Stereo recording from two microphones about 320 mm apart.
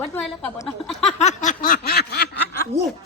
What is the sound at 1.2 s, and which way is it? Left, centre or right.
Snicker, left.